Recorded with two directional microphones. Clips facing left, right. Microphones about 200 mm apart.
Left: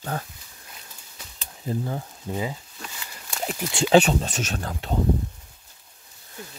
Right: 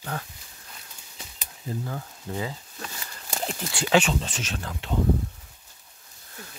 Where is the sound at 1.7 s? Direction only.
25° left (ahead or behind).